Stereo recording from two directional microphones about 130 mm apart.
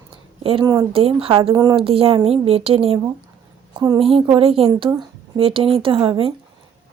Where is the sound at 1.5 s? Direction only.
25° right (ahead or behind).